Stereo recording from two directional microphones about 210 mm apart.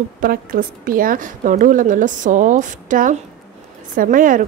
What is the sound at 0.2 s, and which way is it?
A woman's voice, 45° right (ahead or behind).